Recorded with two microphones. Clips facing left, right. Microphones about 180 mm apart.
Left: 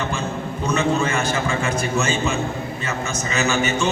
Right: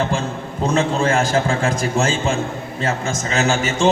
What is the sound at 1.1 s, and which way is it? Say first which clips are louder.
Speech: right 4 dB; 90° right.